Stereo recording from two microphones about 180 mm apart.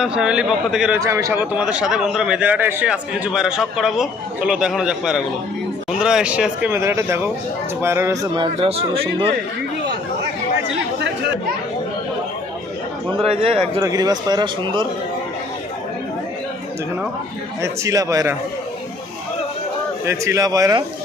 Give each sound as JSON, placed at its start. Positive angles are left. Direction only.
{"t": 0.0, "sound": "a man's voice", "side_deg": -5}
{"t": 0.9, "sound": "a man's voice", "side_deg": -15}
{"t": 8.5, "sound": "speech", "side_deg": -35}
{"t": 13.2, "sound": "speech", "side_deg": -30}
{"t": 13.8, "sound": "speech", "side_deg": -20}
{"t": 17.6, "sound": "speech", "side_deg": -20}
{"t": 20.1, "sound": "speech", "side_deg": -15}